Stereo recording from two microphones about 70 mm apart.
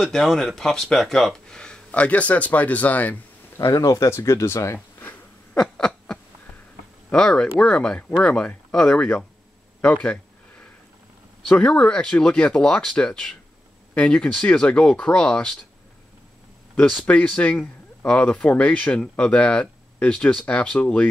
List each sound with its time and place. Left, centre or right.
0.0 s speech: centre; by 3.2 s left
3.7 s speech: left
4.1 s speech: left
5.6 s a sound: centre
7.1 s speech: centre
11.5 s speech: centre
17.0 s speech: centre